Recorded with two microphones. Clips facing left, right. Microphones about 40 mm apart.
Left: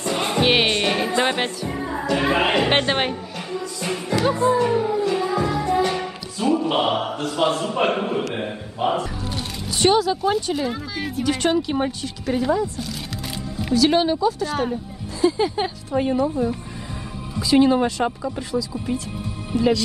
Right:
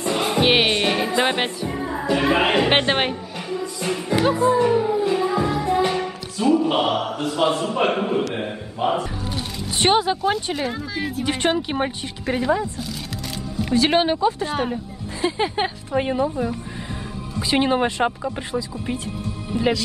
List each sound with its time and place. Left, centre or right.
0.0 s music: centre
1.7 s music: centre
2.1 s speech: centre
4.1 s speech: centre
5.1 s music: centre
6.6 s speech: centre
6.9 s a man's voice: centre
7.2 s speech: centre
9.8 s speech: right
10.2 s speech: centre
11.2 s a woman's voice: right
13.7 s speech: right
15.9 s a woman's voice: right
19.5 s speech: centre